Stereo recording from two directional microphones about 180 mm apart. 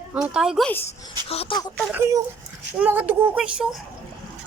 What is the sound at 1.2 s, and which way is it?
Speech, 30° left (ahead or behind).